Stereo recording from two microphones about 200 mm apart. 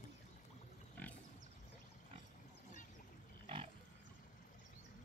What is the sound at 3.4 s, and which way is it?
Pig, 25° right (ahead or behind).